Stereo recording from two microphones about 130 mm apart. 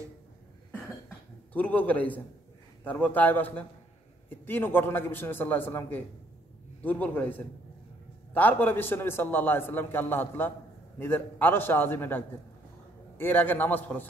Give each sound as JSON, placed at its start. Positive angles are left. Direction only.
{"t": 1.5, "sound": "a man's voice", "side_deg": 10}